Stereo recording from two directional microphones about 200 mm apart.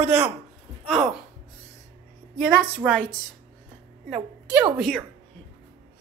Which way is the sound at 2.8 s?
5° right (ahead or behind).